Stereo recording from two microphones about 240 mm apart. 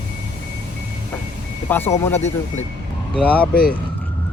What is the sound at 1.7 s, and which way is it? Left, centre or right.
A man's voice, centre.